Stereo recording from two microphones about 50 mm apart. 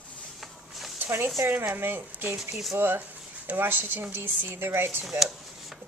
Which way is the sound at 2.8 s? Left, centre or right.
Right.